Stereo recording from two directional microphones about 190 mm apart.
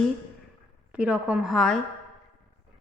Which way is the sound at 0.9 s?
5° right (ahead or behind).